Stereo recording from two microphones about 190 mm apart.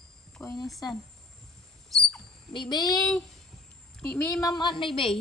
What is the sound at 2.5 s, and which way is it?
Speech, 20° left (ahead or behind).